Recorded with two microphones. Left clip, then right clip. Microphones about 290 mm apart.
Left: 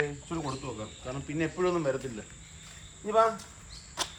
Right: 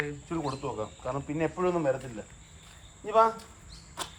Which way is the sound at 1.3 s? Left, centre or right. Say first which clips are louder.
Even; right.